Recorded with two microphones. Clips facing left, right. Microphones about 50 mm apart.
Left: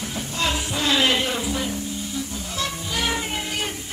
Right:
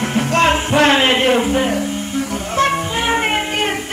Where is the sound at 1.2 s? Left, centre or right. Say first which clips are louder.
Right 11 dB; right.